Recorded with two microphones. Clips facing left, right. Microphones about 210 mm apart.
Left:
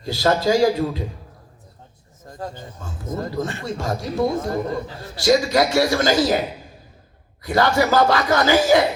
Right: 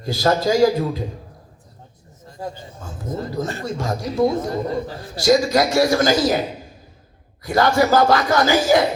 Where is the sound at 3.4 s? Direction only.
40° right (ahead or behind).